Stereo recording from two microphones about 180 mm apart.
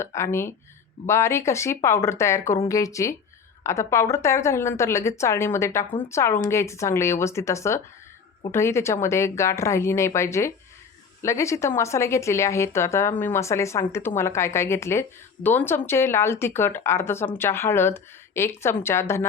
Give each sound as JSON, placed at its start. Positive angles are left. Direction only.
{"t": 0.0, "sound": "a woman's voice", "side_deg": 15}